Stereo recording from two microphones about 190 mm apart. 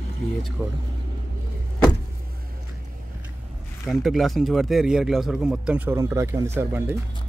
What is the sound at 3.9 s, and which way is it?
Speech, centre (ahead or behind).